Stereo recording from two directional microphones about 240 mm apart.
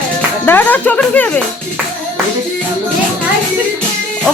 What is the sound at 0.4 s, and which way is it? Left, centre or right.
Speech, centre.